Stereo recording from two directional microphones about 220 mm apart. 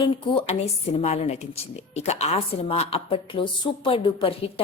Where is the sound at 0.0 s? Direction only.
20° left (ahead or behind).